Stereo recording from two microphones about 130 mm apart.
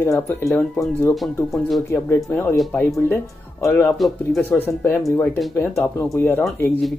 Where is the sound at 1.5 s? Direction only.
Centre (ahead or behind).